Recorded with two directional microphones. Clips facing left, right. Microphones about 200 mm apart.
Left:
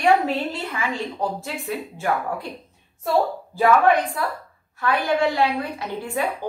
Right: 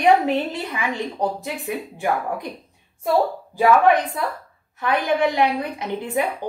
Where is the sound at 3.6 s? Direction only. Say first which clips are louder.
Right 1 dB; 20° right (ahead or behind).